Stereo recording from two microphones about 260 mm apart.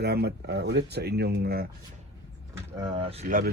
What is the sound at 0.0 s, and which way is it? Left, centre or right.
Speech, right.